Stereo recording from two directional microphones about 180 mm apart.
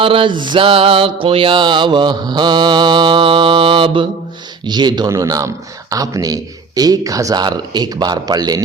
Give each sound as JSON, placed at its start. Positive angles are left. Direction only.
{"t": 0.0, "sound": "mantra", "side_deg": -30}